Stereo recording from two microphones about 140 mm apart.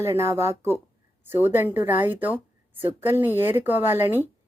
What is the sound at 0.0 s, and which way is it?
Speech, 20° right (ahead or behind).